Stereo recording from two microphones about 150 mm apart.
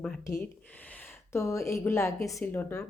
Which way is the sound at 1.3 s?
20° left (ahead or behind).